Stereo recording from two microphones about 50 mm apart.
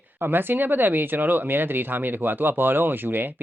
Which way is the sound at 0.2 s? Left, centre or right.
Right.